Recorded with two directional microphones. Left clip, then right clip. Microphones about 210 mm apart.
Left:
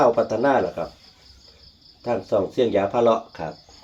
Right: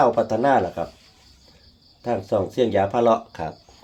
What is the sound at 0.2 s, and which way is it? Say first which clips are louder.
Speech: right 1 dB; 50° right (ahead or behind).